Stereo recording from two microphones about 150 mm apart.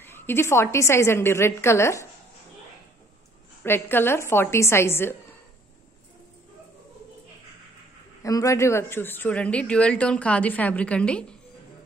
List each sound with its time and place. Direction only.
0.0 s a man's voice: 15° left (ahead or behind)
3.6 s a man's voice: 15° left (ahead or behind)
8.2 s a man's voice: 20° left (ahead or behind)